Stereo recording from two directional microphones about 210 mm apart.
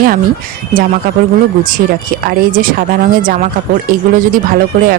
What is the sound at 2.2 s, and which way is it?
Speech, 40° right (ahead or behind).